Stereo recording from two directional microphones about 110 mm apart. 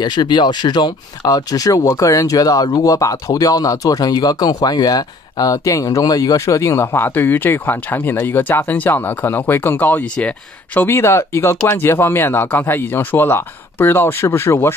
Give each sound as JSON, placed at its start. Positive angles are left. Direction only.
{"t": 0.0, "sound": "speech", "side_deg": 40}